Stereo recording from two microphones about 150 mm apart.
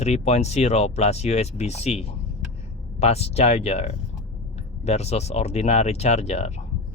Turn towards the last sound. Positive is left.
turn(degrees=45)  # may be behind; listen again after turning